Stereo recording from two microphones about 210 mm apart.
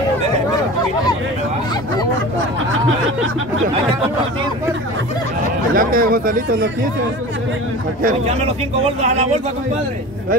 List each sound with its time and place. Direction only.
5.8 s speech: 45° right (ahead or behind)
8.8 s speech: 35° right (ahead or behind)